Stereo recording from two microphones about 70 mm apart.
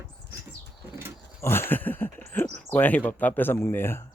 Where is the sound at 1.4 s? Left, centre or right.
Left.